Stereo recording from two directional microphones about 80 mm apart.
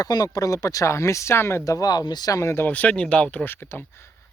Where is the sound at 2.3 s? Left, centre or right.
Left.